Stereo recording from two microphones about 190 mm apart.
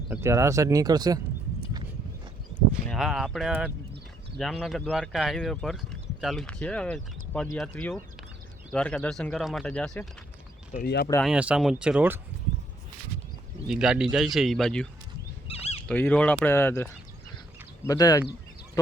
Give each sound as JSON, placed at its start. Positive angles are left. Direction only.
{"t": 0.1, "sound": "speech", "side_deg": -15}
{"t": 2.9, "sound": "speech", "side_deg": 0}
{"t": 10.8, "sound": "speech", "side_deg": 55}
{"t": 11.2, "sound": "speech", "side_deg": -5}
{"t": 13.7, "sound": "speech", "side_deg": -5}
{"t": 15.4, "sound": "a sound", "side_deg": 30}
{"t": 15.9, "sound": "speech", "side_deg": 10}